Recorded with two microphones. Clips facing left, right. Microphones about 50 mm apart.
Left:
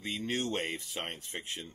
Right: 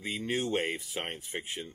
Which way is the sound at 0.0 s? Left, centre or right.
Centre.